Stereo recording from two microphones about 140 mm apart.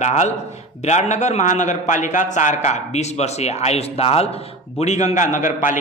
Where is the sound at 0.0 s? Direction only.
55° left (ahead or behind).